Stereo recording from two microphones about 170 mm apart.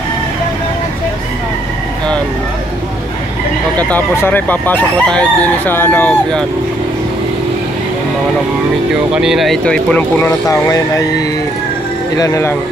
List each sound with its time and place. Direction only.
3.7 s speech: 10° left (ahead or behind)
9.1 s speech: 5° right (ahead or behind)
10.7 s speech: 20° left (ahead or behind)